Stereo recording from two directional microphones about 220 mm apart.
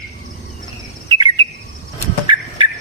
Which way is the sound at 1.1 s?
20° right (ahead or behind).